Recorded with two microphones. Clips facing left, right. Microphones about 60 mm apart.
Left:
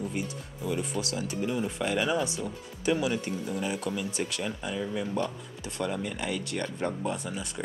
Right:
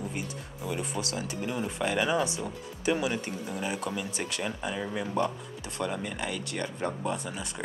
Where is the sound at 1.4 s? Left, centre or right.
Centre.